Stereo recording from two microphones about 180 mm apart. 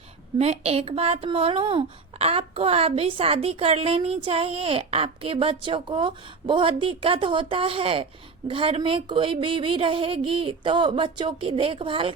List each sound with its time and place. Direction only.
0.3 s speech: 35° right (ahead or behind)